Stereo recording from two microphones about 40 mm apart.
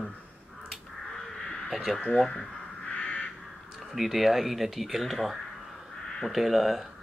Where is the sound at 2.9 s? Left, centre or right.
Left.